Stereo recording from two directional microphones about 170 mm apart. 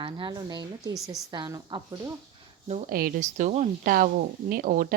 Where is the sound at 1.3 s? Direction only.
25° right (ahead or behind).